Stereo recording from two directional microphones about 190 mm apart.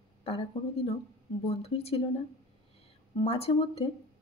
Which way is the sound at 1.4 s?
30° left (ahead or behind).